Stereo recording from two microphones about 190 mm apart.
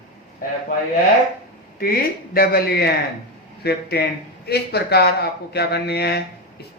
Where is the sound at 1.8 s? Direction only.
55° left (ahead or behind).